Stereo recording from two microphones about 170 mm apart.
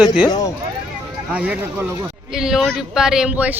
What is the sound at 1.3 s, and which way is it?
A man's voice, 10° right (ahead or behind).